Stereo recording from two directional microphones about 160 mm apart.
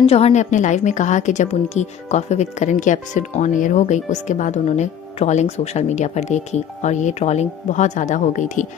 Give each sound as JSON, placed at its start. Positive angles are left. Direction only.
{"t": 0.0, "sound": "a woman's voice", "side_deg": 40}